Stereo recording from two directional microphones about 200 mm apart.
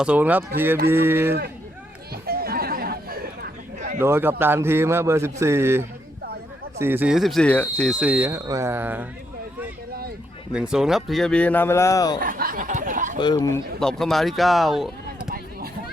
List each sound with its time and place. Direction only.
0.0 s speech: 5° right (ahead or behind)
2.2 s chatter: 50° right (ahead or behind)
3.8 s a sound: 40° right (ahead or behind)
4.0 s speech: 10° right (ahead or behind)
10.5 s speech: 5° right (ahead or behind); by 12.2 s 20° left (ahead or behind)
12.2 s a sound: 45° right (ahead or behind)
13.1 s speech: 20° left (ahead or behind)
13.7 s speech: centre (ahead or behind)